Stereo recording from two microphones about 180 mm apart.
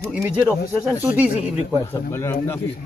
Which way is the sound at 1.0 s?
10° right (ahead or behind).